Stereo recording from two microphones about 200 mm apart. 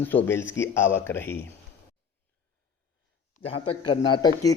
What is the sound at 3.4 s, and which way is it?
Speech, 30° left (ahead or behind).